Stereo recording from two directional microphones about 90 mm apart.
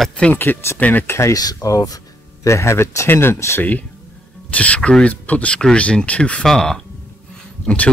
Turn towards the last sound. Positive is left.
turn(degrees=15)  # may be behind; listen again after turning